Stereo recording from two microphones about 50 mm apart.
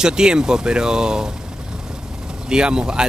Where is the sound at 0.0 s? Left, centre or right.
Centre.